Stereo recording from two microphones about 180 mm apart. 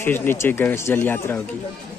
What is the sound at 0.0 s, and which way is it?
Speech, 10° left (ahead or behind).